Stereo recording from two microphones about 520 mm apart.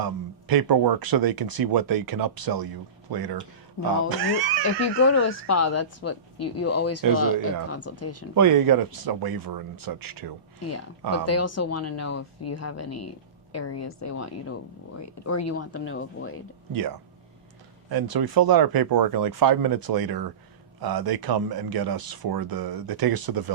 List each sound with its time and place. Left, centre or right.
0.0 s speech: right
4.6 s speech: left
8.4 s speech: right
10.6 s speech: left
16.7 s speech: right